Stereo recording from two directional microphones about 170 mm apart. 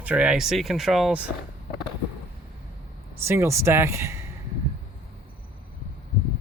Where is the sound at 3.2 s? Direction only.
15° right (ahead or behind).